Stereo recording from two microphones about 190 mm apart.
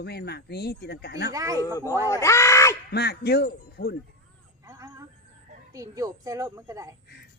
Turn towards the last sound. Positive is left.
turn(degrees=-15)  # may be behind; listen again after turning